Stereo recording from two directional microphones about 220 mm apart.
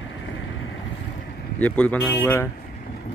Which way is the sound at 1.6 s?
5° left (ahead or behind).